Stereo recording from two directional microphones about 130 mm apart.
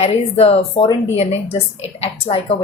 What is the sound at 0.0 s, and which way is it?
Speech, 55° left (ahead or behind).